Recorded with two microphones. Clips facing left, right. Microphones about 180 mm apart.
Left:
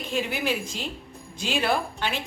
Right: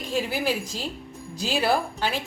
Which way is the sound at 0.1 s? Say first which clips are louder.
Right 2 dB; 35° right (ahead or behind).